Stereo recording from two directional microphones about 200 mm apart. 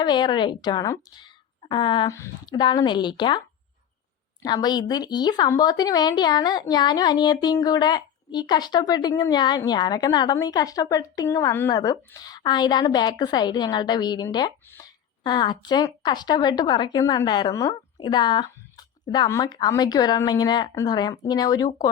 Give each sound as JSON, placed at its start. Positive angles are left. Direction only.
{"t": 0.0, "sound": "a woman's voice", "side_deg": 20}
{"t": 4.4, "sound": "a woman's voice", "side_deg": 20}